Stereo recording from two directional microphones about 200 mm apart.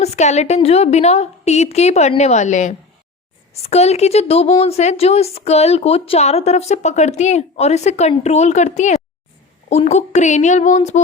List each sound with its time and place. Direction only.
0.0 s a woman's voice: 35° left (ahead or behind)